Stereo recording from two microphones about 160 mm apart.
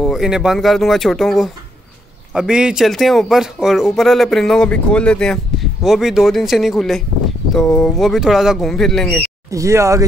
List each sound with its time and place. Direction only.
0.0 s speech: centre (ahead or behind)
9.5 s speech: 20° right (ahead or behind)